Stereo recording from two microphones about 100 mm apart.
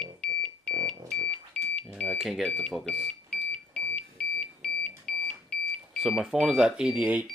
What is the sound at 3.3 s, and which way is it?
Alarm clock, 15° left (ahead or behind).